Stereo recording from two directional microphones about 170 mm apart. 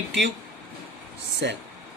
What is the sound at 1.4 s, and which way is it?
Speech, 90° right.